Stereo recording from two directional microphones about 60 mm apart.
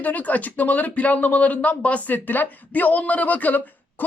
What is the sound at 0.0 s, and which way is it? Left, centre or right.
Speech, left.